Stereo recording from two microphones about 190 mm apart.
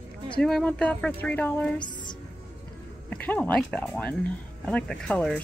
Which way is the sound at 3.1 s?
10° left (ahead or behind).